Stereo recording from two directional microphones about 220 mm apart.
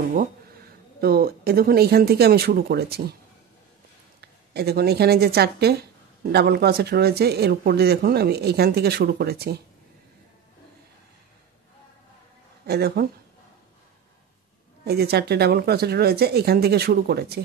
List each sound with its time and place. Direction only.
1.0 s speech: 45° right (ahead or behind)
4.2 s speech: 45° right (ahead or behind)
12.6 s speech: 45° right (ahead or behind)
14.9 s speech: 45° right (ahead or behind)